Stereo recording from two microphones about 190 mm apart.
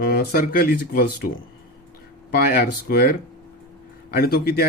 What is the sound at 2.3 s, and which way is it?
Speech, 50° left (ahead or behind).